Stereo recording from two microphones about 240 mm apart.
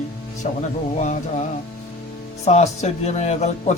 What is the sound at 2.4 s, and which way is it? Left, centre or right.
Speech, left.